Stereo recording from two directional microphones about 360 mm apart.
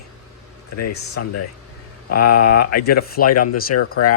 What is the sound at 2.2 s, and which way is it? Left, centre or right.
Speech, left.